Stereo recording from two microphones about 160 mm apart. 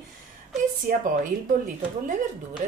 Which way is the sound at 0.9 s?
65° right (ahead or behind).